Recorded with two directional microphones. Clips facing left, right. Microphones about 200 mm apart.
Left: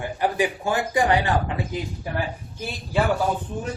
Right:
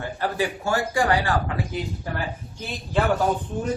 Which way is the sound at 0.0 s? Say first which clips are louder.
Left 2 dB; 15° left (ahead or behind).